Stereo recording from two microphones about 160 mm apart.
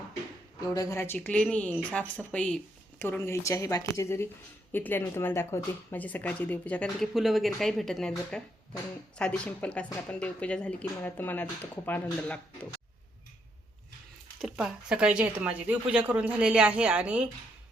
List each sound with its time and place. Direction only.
0.6 s speech: 20° left (ahead or behind)
14.4 s speech: 5° right (ahead or behind)